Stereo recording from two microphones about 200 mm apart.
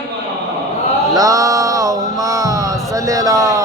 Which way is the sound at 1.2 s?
15° right (ahead or behind).